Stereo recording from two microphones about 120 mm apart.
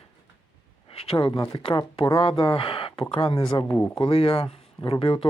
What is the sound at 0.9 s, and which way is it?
Speech, 55° left (ahead or behind).